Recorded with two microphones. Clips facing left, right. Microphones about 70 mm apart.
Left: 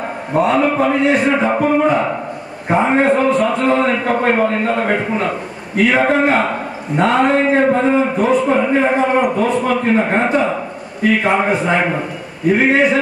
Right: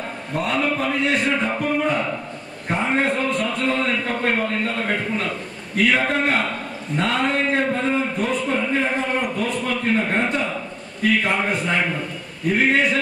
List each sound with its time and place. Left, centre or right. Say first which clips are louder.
0.3 s a man's voice: left 8 dB; centre